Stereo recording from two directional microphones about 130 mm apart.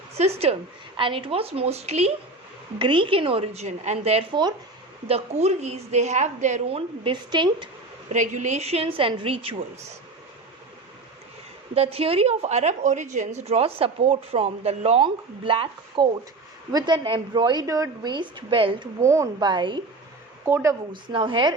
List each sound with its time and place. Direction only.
0.2 s a woman's voice: 55° right (ahead or behind)
0.9 s a woman's voice: 40° right (ahead or behind)
2.7 s a woman's voice: 40° right (ahead or behind)
4.3 s a woman's voice: 35° right (ahead or behind)
5.0 s a woman's voice: 55° right (ahead or behind)
6.7 s a woman's voice: 40° right (ahead or behind)
8.1 s a woman's voice: 70° right (ahead or behind); by 9.6 s 45° right (ahead or behind)
11.7 s a woman's voice: 50° right (ahead or behind)
19.0 s a woman's voice: 25° right (ahead or behind)
20.4 s a woman's voice: 20° right (ahead or behind)
20.9 s a woman's voice: 40° right (ahead or behind)